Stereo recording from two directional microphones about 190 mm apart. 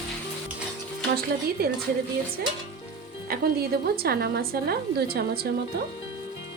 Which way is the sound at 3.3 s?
55° right (ahead or behind).